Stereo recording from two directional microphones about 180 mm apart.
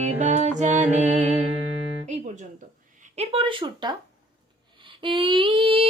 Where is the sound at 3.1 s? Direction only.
35° right (ahead or behind).